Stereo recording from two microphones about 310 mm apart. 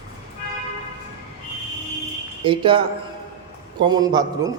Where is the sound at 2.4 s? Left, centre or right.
Centre.